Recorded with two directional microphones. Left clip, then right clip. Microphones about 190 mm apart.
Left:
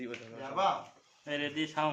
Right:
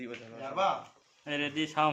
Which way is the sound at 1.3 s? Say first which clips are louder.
Right 2 dB; 35° right (ahead or behind).